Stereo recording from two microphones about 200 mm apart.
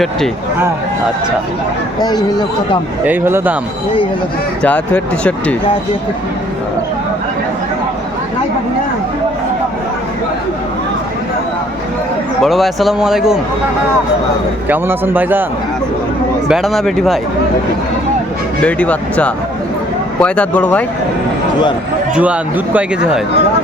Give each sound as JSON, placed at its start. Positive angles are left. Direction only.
{"t": 2.0, "sound": "speech", "side_deg": 20}
{"t": 3.0, "sound": "speech", "side_deg": -10}
{"t": 4.6, "sound": "speech", "side_deg": 5}
{"t": 12.4, "sound": "speech", "side_deg": 0}
{"t": 14.7, "sound": "speech", "side_deg": -10}
{"t": 16.5, "sound": "speech", "side_deg": 0}
{"t": 18.6, "sound": "speech", "side_deg": 5}
{"t": 22.1, "sound": "speech", "side_deg": -5}